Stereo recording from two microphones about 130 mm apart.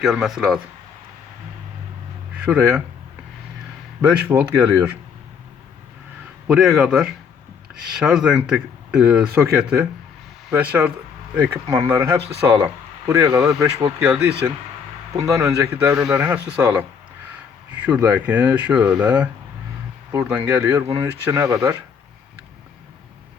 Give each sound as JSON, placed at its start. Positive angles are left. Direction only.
{"t": 0.0, "sound": "speech", "side_deg": -5}
{"t": 2.3, "sound": "speech", "side_deg": -10}
{"t": 4.0, "sound": "speech", "side_deg": -15}
{"t": 6.5, "sound": "speech", "side_deg": -5}
{"t": 11.7, "sound": "speech", "side_deg": -20}
{"t": 15.1, "sound": "speech", "side_deg": -25}